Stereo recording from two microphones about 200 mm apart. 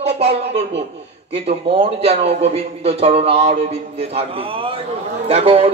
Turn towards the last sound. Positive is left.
turn(degrees=-30)  # may be behind; listen again after turning